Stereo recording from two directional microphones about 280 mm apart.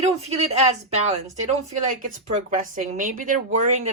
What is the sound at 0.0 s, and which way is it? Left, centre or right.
A woman's voice, right.